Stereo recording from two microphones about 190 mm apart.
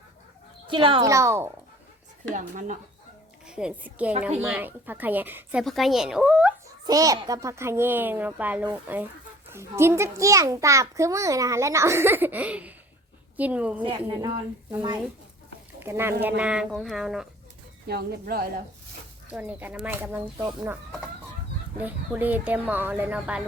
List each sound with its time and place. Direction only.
0.7 s speech: 25° right (ahead or behind)
1.1 s a child's voice: 15° right (ahead or behind)
2.3 s speech: 40° right (ahead or behind)
3.4 s a woman's voice: 5° right (ahead or behind)
6.8 s a child's voice: 20° right (ahead or behind)
13.8 s speech: 25° right (ahead or behind)
15.8 s speech: 10° right (ahead or behind)
17.8 s speech: 55° right (ahead or behind)
19.3 s a child's voice: 10° right (ahead or behind)